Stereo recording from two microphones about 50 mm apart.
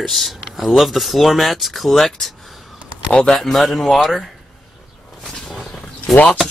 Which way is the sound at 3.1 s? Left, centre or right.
Centre.